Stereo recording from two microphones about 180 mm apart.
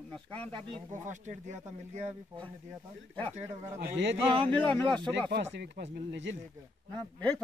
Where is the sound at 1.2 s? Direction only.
40° right (ahead or behind).